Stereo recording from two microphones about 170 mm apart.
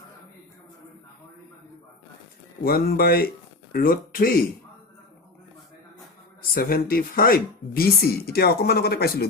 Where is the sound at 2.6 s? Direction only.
60° left (ahead or behind).